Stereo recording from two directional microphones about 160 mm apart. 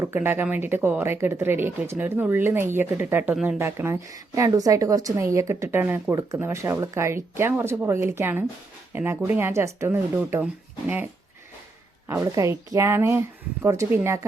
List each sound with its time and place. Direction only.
0.0 s speech: 15° right (ahead or behind)
12.0 s speech: 20° right (ahead or behind)